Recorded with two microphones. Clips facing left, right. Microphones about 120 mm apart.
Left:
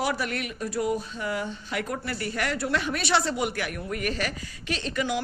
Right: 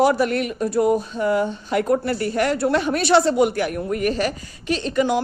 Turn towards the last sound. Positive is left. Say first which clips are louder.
# right 8 dB
turn(degrees=-35)  # may be behind; listen again after turning